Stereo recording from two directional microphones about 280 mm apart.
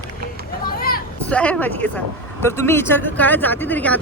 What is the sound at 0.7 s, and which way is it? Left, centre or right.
Vehicle, left.